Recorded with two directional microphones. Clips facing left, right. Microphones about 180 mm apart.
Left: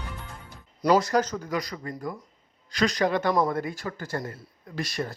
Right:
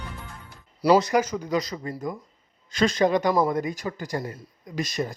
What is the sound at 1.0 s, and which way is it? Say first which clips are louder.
Speech: right 2 dB; 15° right (ahead or behind).